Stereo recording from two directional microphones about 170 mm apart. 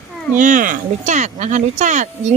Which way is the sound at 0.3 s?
50° right (ahead or behind).